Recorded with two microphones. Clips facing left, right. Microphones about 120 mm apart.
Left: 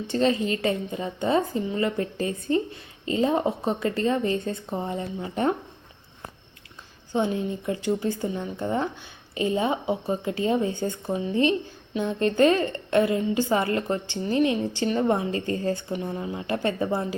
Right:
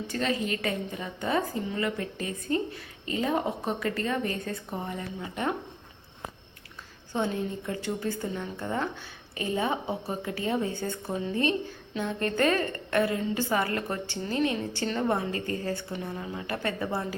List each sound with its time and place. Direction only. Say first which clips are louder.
0.1 s a woman's voice: left 7 dB; 25° left (ahead or behind)
7.1 s a woman's voice: left 4 dB; 15° left (ahead or behind)